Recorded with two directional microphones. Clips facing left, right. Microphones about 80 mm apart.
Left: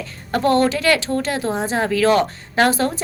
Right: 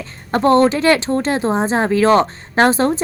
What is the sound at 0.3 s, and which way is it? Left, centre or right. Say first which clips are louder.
A woman's voice: right 4 dB; right.